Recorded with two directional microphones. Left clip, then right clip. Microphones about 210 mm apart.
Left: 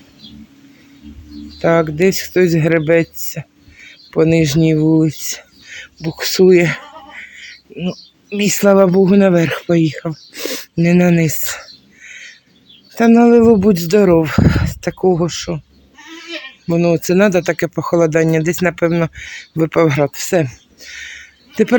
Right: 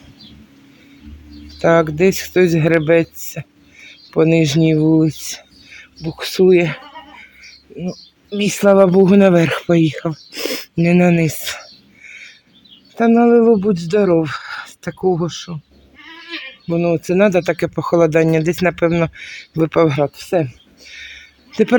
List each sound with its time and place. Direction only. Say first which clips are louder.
1.5 s speech: even; centre (ahead or behind); by 15.6 s 15° left (ahead or behind)
16.6 s speech: left 3 dB; 15° left (ahead or behind)